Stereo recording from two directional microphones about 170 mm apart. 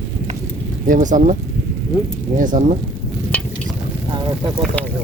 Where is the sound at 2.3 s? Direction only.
50° right (ahead or behind).